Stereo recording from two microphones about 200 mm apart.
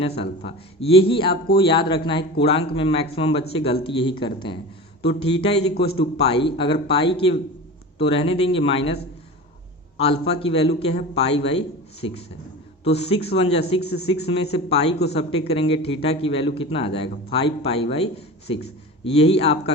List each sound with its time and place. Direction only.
0.0 s a man's voice: 30° left (ahead or behind)
5.7 s a man's voice: 50° left (ahead or behind)
6.0 s a man's voice: 25° left (ahead or behind)
10.0 s a man's voice: 30° left (ahead or behind)